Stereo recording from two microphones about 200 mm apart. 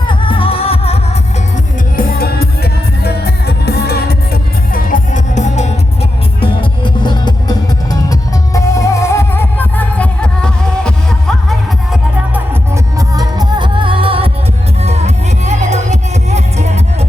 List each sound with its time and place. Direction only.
0.1 s music: 25° left (ahead or behind)
2.0 s music: 50° left (ahead or behind); by 12.4 s centre (ahead or behind)
12.7 s music: 15° right (ahead or behind); by 17.1 s 35° right (ahead or behind)